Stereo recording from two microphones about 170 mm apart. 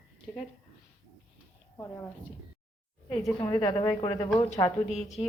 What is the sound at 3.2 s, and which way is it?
A woman's voice, 25° left (ahead or behind).